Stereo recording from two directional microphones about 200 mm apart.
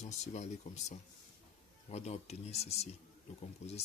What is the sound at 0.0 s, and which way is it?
Speech, 35° left (ahead or behind).